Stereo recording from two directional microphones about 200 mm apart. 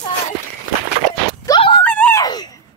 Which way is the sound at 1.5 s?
25° left (ahead or behind).